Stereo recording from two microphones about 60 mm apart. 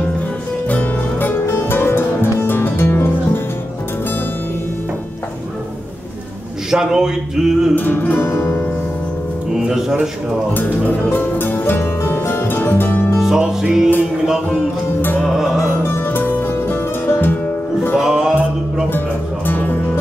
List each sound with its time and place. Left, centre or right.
0.7 s music: left
1.3 s music: left
6.7 s speech: centre
7.7 s music: left
8.3 s music: left
9.5 s speech: centre
10.5 s music: left
13.2 s music: centre
15.0 s music: left
15.2 s music: centre
16.1 s music: left
17.9 s music: centre
18.9 s music: left